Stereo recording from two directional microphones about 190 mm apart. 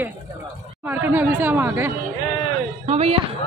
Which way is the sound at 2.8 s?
35° right (ahead or behind).